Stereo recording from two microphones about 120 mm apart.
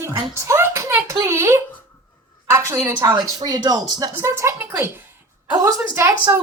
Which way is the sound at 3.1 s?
35° right (ahead or behind).